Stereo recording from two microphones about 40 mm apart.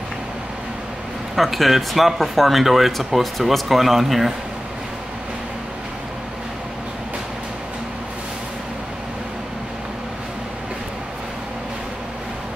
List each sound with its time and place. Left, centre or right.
1.3 s speech: centre